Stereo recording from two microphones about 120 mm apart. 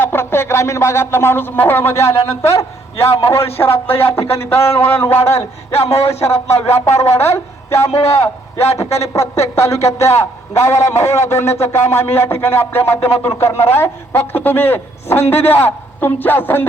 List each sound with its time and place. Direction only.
0.0 s a sound: 20° left (ahead or behind)
3.3 s a man's voice: 20° left (ahead or behind)
5.8 s speech: 60° left (ahead or behind)
6.9 s a man's voice: 20° left (ahead or behind)